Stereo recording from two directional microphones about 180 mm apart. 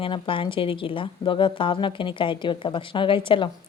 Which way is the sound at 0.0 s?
30° left (ahead or behind).